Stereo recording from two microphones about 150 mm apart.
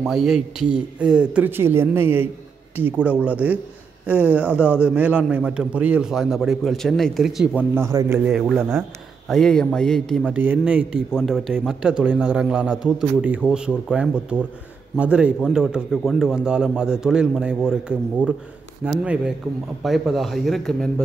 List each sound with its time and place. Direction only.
0.0 s a man's voice: centre (ahead or behind)
7.7 s a man's voice: 20° right (ahead or behind)
8.3 s a man's voice: centre (ahead or behind)
8.5 s a man's voice: 15° right (ahead or behind)
9.3 s a man's voice: 5° left (ahead or behind)
10.2 s a man's voice: 10° right (ahead or behind)